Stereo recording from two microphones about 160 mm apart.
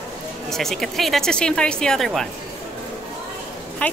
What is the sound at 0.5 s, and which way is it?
A woman's voice, centre (ahead or behind).